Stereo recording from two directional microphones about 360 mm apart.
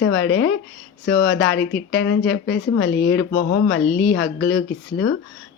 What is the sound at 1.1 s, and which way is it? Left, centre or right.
Speech, centre.